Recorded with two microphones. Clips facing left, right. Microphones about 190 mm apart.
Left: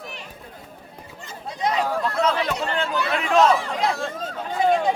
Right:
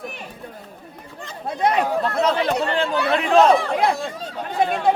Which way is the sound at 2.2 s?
30° right (ahead or behind).